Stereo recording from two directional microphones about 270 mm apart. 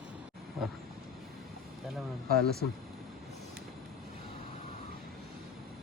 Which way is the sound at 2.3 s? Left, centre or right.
Right.